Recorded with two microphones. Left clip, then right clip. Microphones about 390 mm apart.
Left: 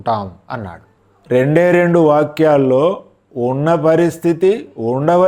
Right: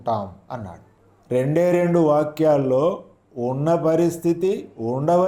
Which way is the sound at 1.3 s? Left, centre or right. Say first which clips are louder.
Left 7 dB; left.